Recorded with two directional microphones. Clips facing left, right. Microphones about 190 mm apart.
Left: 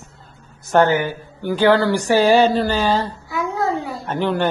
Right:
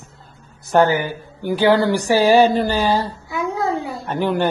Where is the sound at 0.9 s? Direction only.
10° right (ahead or behind).